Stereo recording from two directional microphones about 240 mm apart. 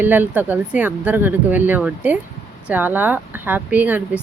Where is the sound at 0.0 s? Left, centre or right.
Centre.